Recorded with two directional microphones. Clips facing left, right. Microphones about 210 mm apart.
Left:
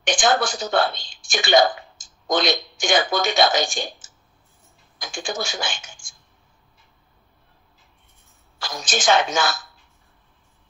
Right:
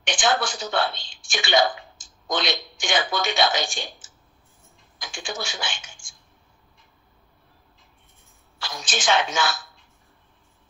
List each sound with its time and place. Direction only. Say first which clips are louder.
0.0 s speech: left 3 dB; 40° left (ahead or behind)
8.5 s a woman's voice: left 4 dB; 45° left (ahead or behind)